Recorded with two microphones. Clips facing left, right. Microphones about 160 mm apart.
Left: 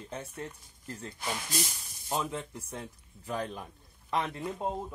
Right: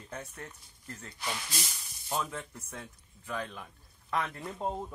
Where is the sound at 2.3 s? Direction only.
30° left (ahead or behind).